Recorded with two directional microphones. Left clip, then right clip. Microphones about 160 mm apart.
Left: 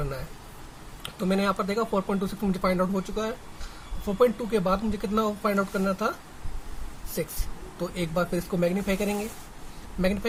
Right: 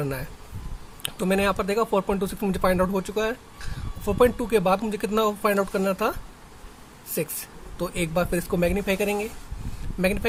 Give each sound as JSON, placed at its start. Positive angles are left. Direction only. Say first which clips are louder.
{"t": 1.0, "sound": "speech", "louder": "right 3 dB", "side_deg": -55}